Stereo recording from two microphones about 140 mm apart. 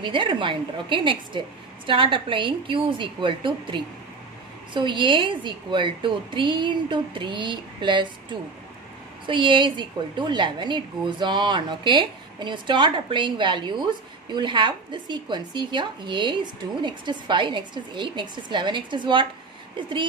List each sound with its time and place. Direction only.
0.0 s a woman's voice: 35° right (ahead or behind)
9.2 s a woman's voice: 35° right (ahead or behind)